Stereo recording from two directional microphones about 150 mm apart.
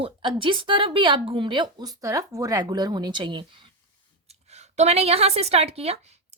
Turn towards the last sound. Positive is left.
turn(degrees=-45)  # may be behind; listen again after turning